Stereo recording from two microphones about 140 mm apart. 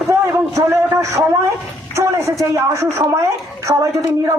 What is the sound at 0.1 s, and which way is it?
A man's voice, 20° right (ahead or behind).